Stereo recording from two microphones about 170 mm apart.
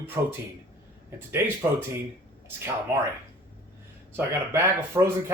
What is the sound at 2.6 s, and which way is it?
Speech, 15° right (ahead or behind).